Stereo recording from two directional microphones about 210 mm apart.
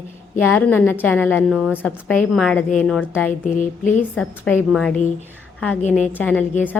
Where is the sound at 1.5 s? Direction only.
5° right (ahead or behind).